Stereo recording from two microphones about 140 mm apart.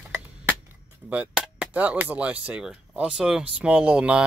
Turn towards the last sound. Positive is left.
turn(degrees=-10)  # may be behind; listen again after turning